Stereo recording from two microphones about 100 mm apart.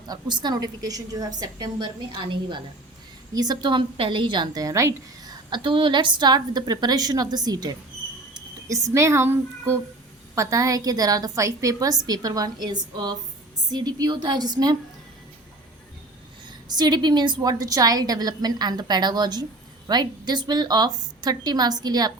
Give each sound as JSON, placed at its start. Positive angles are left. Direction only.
{"t": 0.1, "sound": "a woman's voice", "side_deg": -45}
{"t": 3.3, "sound": "a woman's voice", "side_deg": -45}
{"t": 5.5, "sound": "a woman's voice", "side_deg": -55}
{"t": 16.6, "sound": "a woman's voice", "side_deg": -45}